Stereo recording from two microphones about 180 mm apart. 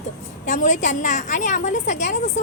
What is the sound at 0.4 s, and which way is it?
A woman's voice, 45° left (ahead or behind).